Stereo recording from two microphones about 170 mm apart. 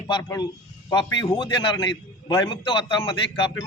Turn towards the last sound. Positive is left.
turn(degrees=30)  # may be behind; listen again after turning